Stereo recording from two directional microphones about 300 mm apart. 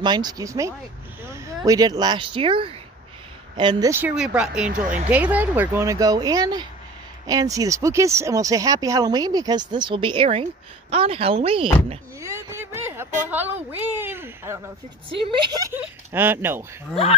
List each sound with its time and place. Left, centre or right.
0.0 s speech: centre
4.8 s speech: right
5.1 s speech: centre